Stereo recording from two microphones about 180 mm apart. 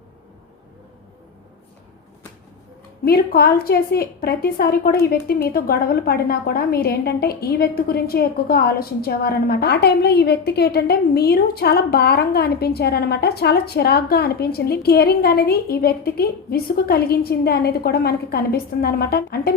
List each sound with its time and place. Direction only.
3.0 s a woman's voice: 60° left (ahead or behind)